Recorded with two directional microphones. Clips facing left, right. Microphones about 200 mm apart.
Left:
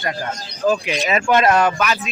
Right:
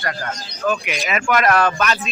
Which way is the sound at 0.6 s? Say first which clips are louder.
Left 3 dB; 30° left (ahead or behind).